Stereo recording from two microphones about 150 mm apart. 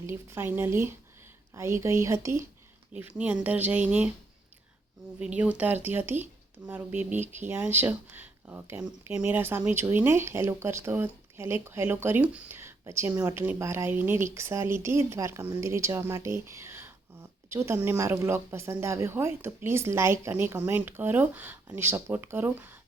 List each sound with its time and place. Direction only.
0.0 s speech: 15° right (ahead or behind)
2.9 s speech: 10° right (ahead or behind)
5.2 s speech: 10° right (ahead or behind)